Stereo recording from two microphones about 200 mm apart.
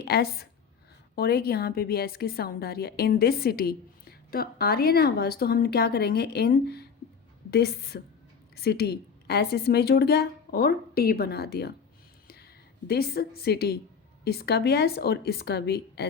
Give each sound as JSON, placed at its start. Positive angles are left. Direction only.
{"t": 0.0, "sound": "a woman's voice", "side_deg": 50}
{"t": 12.9, "sound": "a woman's voice", "side_deg": 50}